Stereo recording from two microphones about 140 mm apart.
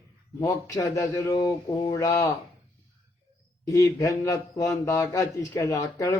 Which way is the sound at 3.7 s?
25° left (ahead or behind).